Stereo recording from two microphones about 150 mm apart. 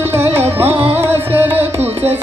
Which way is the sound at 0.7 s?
40° right (ahead or behind).